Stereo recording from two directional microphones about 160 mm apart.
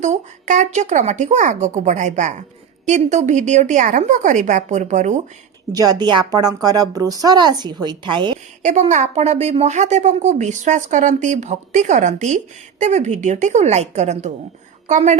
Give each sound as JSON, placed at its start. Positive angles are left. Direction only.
{"t": 0.0, "sound": "speech", "side_deg": -50}
{"t": 5.7, "sound": "a woman's voice", "side_deg": -25}
{"t": 8.6, "sound": "a woman's voice", "side_deg": -50}